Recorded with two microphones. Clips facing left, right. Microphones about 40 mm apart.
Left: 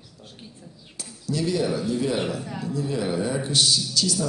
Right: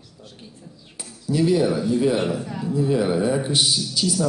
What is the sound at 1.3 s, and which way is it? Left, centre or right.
Speech, centre.